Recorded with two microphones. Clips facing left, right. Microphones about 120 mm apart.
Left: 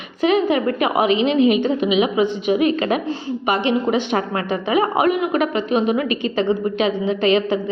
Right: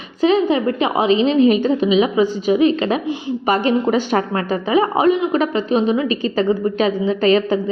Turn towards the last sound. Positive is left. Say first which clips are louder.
# right 2 dB
turn(degrees=-40)  # may be behind; listen again after turning